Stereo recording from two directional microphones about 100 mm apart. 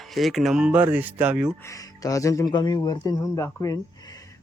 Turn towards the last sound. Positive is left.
turn(degrees=30)  # may be behind; listen again after turning